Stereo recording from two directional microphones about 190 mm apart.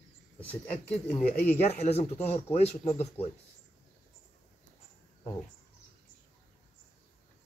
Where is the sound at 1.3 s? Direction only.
35° left (ahead or behind).